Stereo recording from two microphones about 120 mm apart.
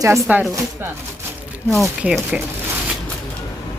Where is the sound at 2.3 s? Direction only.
10° right (ahead or behind).